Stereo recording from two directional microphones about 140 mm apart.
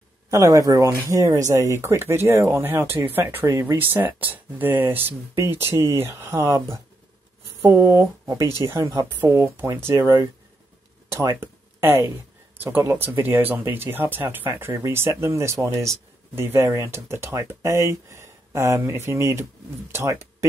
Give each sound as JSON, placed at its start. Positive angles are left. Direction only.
{"t": 0.3, "sound": "speech", "side_deg": -25}